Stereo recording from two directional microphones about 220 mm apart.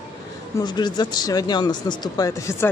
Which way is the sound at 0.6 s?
20° left (ahead or behind).